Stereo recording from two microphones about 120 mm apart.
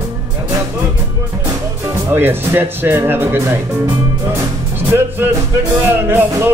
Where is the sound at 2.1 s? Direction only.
20° right (ahead or behind).